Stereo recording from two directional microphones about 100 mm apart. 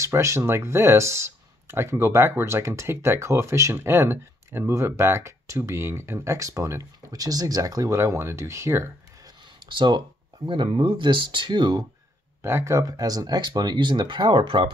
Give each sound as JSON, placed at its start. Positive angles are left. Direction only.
{"t": 0.0, "sound": "speech", "side_deg": -30}
{"t": 9.7, "sound": "speech", "side_deg": -50}
{"t": 12.4, "sound": "speech", "side_deg": -25}